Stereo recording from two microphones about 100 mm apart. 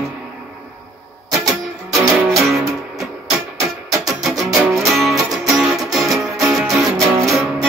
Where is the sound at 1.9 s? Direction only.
Centre (ahead or behind).